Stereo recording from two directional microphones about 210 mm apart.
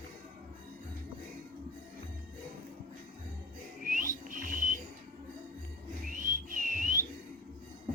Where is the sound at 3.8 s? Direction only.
40° right (ahead or behind).